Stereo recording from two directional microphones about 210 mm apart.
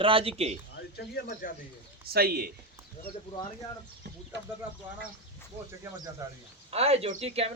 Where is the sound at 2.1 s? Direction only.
45° right (ahead or behind).